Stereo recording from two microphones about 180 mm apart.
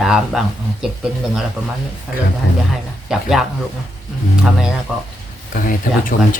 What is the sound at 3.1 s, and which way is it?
Speech, 5° right (ahead or behind).